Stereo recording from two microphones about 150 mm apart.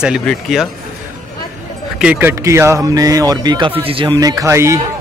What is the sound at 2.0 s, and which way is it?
Speech, 10° right (ahead or behind).